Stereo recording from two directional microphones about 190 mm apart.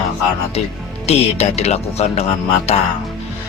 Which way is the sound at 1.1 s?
35° left (ahead or behind).